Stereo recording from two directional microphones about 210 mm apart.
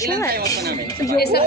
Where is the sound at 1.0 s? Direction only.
15° left (ahead or behind).